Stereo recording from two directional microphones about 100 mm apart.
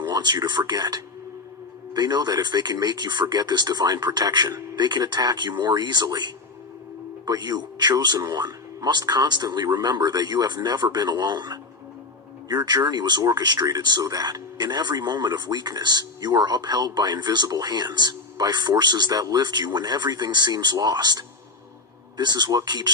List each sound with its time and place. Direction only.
0.0 s speech: 45° right (ahead or behind)
12.6 s speech: 45° right (ahead or behind)